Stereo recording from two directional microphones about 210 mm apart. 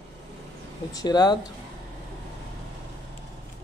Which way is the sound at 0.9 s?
20° left (ahead or behind).